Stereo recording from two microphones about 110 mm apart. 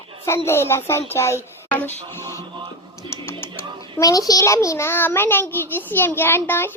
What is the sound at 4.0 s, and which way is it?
A child's voice, 35° left (ahead or behind).